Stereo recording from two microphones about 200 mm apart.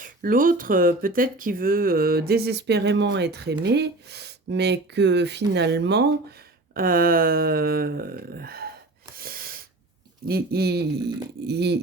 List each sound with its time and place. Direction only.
0.0 s speech: 45° right (ahead or behind)
6.7 s speech: 45° right (ahead or behind)
9.1 s a sound: 45° right (ahead or behind)
10.2 s speech: 50° right (ahead or behind)